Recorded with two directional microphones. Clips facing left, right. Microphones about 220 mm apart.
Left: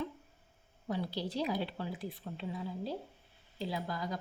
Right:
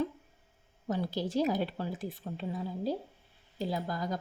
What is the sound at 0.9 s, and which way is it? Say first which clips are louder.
Speech: right 4 dB; 45° right (ahead or behind).